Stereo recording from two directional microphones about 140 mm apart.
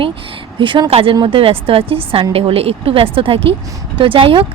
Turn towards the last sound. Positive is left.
turn(degrees=-40)  # may be behind; listen again after turning